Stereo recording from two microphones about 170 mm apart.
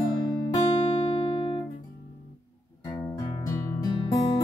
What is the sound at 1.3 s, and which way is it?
Music, 30° left (ahead or behind).